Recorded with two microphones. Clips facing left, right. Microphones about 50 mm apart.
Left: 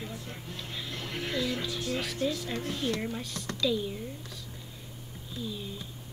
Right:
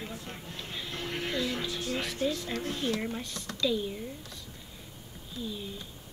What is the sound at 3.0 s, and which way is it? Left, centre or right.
Speech, centre.